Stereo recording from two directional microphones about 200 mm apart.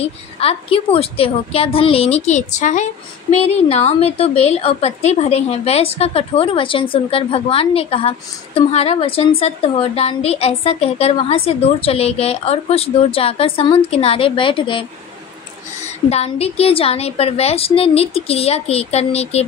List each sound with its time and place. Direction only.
0.0 s a woman's voice: 30° left (ahead or behind)
16.1 s a woman's voice: 30° left (ahead or behind)